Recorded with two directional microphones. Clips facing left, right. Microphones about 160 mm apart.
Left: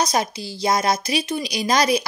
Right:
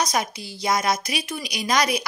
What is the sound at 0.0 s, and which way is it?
A woman's voice, 30° left (ahead or behind).